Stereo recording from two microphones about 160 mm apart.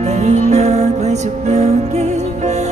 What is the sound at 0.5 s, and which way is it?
Music, 45° right (ahead or behind).